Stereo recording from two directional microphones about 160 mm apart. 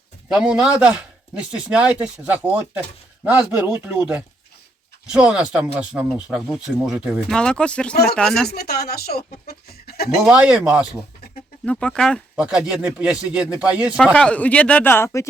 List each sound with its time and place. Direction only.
0.3 s a man's voice: 5° right (ahead or behind)
8.4 s speech: 80° left
10.2 s speech: 5° right (ahead or behind)
11.6 s speech: 5° left (ahead or behind)
12.4 s speech: 5° right (ahead or behind)
14.0 s speech: 5° left (ahead or behind)